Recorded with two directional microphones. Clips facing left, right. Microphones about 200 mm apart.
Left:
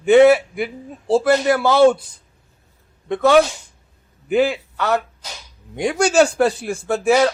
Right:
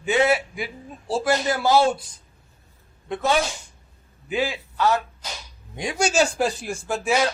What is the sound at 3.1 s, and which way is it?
A man's voice, 65° left (ahead or behind).